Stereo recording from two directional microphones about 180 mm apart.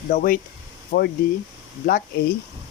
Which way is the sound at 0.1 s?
50° left (ahead or behind).